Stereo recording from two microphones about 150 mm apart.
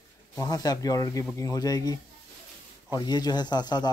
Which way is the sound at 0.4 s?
25° left (ahead or behind).